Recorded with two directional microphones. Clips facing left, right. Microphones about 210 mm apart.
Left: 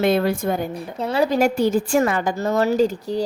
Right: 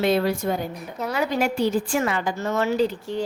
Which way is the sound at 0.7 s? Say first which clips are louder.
Left 5 dB; 30° left (ahead or behind).